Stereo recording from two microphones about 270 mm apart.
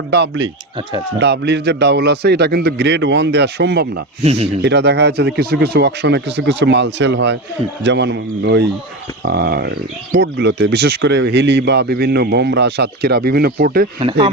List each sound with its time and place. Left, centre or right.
0.1 s speech: right
4.2 s speech: right
4.6 s speech: right
14.0 s speech: centre